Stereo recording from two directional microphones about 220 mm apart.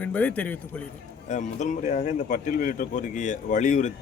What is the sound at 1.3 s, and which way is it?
Speech, 35° left (ahead or behind).